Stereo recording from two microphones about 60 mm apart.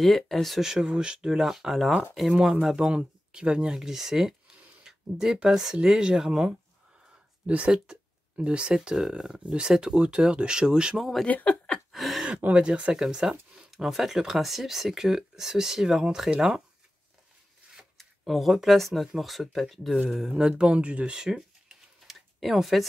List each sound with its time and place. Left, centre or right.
0.0 s speech: centre
0.6 s speech: centre
2.3 s speech: centre
11.2 s speech: left
11.9 s a sound: centre
12.3 s speech: right
17.9 s speech: centre
21.2 s a sound: centre